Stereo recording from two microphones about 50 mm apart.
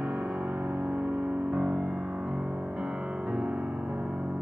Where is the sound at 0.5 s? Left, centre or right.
Right.